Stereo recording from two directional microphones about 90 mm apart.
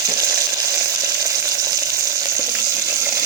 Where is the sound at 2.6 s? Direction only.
35° right (ahead or behind).